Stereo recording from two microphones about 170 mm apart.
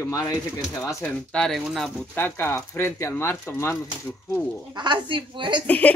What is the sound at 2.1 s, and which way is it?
Speech, 10° left (ahead or behind).